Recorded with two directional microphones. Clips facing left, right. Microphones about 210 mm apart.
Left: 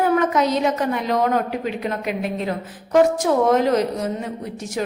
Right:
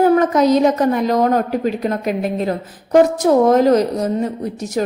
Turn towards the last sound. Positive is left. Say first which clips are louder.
# right 5 dB
turn(degrees=-40)  # may be behind; listen again after turning